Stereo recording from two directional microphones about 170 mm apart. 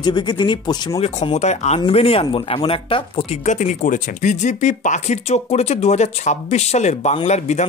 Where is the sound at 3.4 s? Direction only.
45° left (ahead or behind).